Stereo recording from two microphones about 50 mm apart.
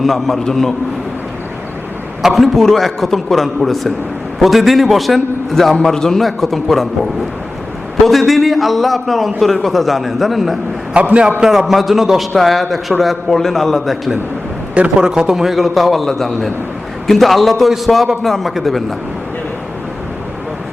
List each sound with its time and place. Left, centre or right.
0.0 s a man's voice: centre
2.2 s a man's voice: centre
10.9 s a man's voice: right
11.3 s a man's voice: centre
14.8 s a man's voice: centre